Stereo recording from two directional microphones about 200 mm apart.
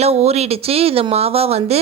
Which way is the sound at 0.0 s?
30° right (ahead or behind).